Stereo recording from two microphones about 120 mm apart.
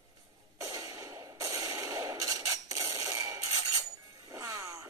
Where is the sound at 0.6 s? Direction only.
25° right (ahead or behind).